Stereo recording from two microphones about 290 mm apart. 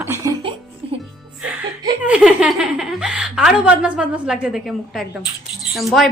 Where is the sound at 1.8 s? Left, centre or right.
Centre.